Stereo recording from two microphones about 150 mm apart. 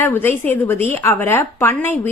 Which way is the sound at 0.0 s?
15° left (ahead or behind).